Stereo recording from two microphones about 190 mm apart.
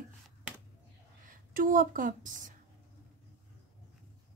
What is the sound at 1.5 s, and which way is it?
A woman's voice, 45° right (ahead or behind).